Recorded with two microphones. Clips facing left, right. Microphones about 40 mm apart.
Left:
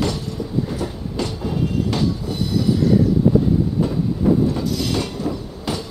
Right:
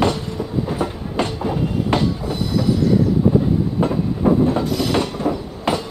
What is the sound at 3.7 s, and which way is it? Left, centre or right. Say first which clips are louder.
Train: right 1 dB; right.